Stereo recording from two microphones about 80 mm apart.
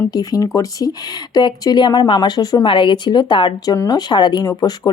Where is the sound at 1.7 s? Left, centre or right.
Left.